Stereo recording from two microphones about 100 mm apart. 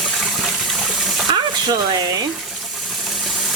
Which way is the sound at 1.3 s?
45° right (ahead or behind).